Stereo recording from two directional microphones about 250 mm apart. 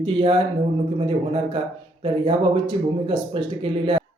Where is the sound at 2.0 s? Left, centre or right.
Right.